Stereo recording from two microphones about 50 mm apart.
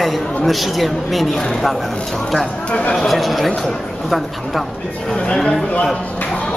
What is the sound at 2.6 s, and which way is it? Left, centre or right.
Speech, left.